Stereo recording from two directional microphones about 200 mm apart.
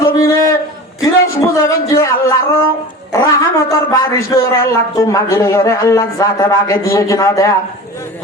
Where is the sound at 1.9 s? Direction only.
15° left (ahead or behind).